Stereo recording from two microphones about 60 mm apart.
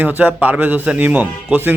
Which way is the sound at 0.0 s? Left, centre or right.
Right.